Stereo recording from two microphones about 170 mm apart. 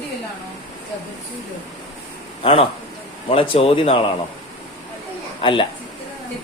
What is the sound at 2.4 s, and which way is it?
A man's voice, 35° left (ahead or behind).